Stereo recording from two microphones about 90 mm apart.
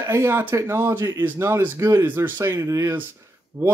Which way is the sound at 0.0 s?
30° right (ahead or behind).